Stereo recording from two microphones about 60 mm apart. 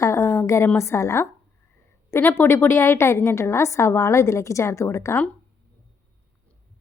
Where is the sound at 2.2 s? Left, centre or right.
Left.